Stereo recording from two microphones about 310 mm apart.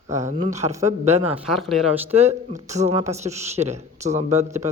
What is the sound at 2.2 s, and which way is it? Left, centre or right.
Speech, right.